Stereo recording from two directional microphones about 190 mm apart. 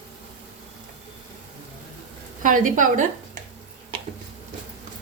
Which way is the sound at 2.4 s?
45° right (ahead or behind).